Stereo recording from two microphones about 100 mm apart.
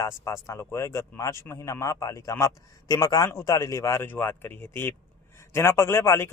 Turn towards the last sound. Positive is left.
turn(degrees=25)  # may be behind; listen again after turning